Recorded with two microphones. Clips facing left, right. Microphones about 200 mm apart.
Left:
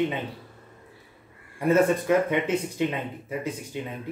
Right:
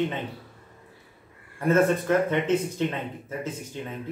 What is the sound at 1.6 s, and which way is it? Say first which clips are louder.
Speech: left 1 dB; 10° left (ahead or behind).